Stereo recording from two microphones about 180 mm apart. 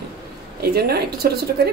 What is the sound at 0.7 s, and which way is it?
Speech, 60° right (ahead or behind).